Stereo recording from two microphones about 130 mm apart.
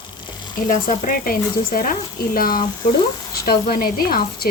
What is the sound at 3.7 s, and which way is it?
Speech, 90° left.